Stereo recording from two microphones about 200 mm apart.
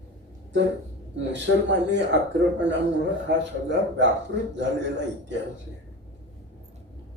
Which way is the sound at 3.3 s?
60° right (ahead or behind).